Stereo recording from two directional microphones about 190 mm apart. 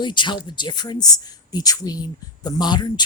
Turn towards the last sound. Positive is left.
turn(degrees=20)  # may be behind; listen again after turning